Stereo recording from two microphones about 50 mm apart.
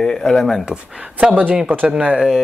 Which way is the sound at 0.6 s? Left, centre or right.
Centre.